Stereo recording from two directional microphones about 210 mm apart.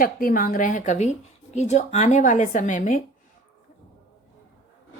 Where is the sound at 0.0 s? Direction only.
40° left (ahead or behind).